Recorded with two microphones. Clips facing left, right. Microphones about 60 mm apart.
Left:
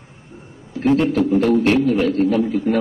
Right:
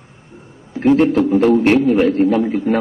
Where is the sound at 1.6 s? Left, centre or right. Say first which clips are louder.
Right 3 dB; right.